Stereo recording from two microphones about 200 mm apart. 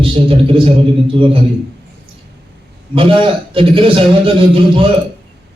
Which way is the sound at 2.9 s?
25° right (ahead or behind).